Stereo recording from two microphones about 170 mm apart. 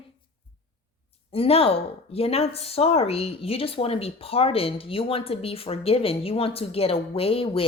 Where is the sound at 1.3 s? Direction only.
35° left (ahead or behind).